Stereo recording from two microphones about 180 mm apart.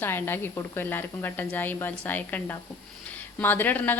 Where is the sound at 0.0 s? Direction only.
10° left (ahead or behind).